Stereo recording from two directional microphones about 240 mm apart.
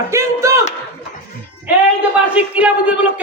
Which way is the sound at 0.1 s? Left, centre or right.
Centre.